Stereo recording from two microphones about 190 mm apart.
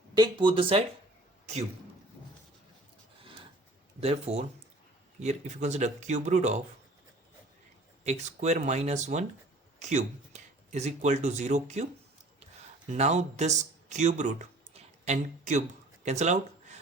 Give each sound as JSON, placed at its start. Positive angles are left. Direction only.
{"t": 0.1, "sound": "speech", "side_deg": -25}
{"t": 4.0, "sound": "speech", "side_deg": -35}
{"t": 8.0, "sound": "speech", "side_deg": -35}
{"t": 12.9, "sound": "speech", "side_deg": -40}